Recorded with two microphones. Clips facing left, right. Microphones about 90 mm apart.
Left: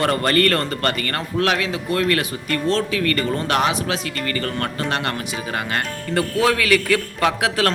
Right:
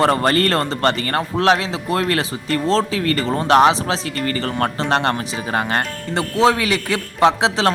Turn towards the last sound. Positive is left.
turn(degrees=-25)  # may be behind; listen again after turning